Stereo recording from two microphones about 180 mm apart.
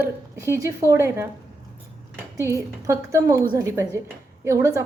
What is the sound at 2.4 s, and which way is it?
A woman's voice, 15° right (ahead or behind).